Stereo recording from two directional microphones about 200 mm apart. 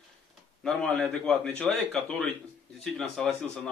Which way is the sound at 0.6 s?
5° left (ahead or behind).